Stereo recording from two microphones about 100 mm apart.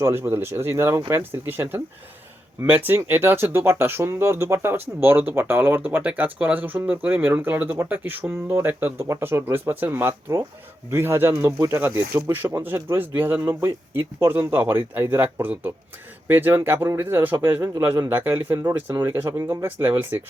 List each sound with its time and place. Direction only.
0.0 s speech: 25° right (ahead or behind)